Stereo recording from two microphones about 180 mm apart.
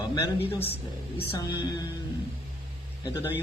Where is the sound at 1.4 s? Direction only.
20° left (ahead or behind).